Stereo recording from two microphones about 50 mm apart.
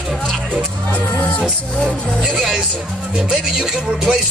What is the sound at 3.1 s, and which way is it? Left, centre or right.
Music, centre.